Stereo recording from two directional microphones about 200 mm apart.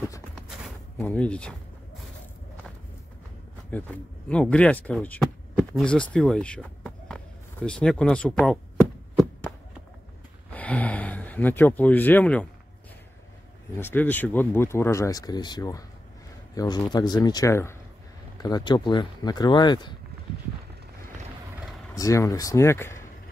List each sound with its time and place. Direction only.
1.0 s speech: 5° left (ahead or behind)
3.7 s speech: 10° left (ahead or behind)
10.5 s speech: 5° left (ahead or behind)
13.7 s speech: 10° left (ahead or behind)
21.9 s speech: 15° left (ahead or behind)